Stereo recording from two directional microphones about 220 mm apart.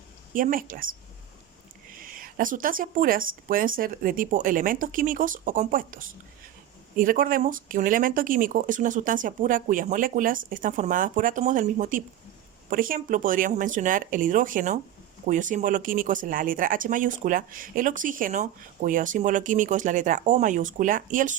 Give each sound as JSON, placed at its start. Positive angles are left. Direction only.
{"t": 0.3, "sound": "speech", "side_deg": -40}
{"t": 2.1, "sound": "speech", "side_deg": -40}